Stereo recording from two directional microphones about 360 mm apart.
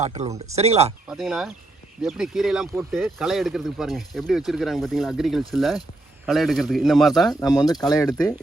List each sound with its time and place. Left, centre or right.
0.0 s speech: centre
1.0 s speech: centre
7.5 s speech: centre